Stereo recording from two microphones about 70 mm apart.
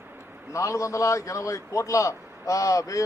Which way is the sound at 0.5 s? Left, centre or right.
Left.